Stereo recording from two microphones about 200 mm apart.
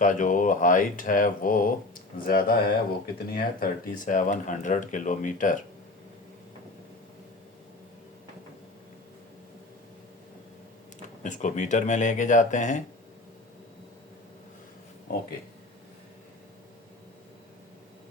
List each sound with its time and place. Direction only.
0.0 s speech: 40° left (ahead or behind)
11.2 s speech: 40° left (ahead or behind)
15.1 s speech: 45° left (ahead or behind)